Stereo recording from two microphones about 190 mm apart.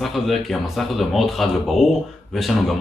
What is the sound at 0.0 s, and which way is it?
Speech, centre (ahead or behind).